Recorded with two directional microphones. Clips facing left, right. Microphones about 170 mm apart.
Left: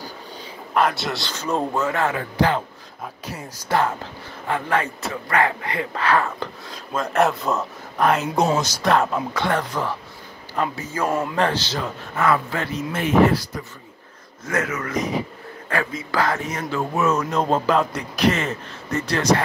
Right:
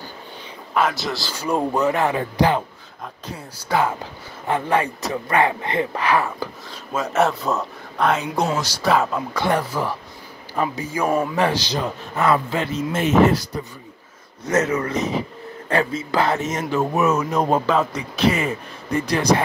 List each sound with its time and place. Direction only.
0.7 s speech: centre (ahead or behind)
1.3 s speech: 10° right (ahead or behind)
3.8 s speech: 15° right (ahead or behind); by 8.3 s centre (ahead or behind)
8.4 s speech: 20° left (ahead or behind)
8.8 s a man's voice: centre (ahead or behind); by 13.4 s 20° right (ahead or behind)
14.5 s a man's voice: 25° right (ahead or behind)
17.6 s speech: centre (ahead or behind)
18.3 s speech: 10° right (ahead or behind)